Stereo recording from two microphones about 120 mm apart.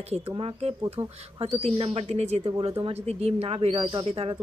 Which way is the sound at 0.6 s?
60° right (ahead or behind).